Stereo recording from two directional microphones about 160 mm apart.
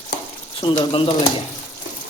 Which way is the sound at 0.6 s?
30° left (ahead or behind).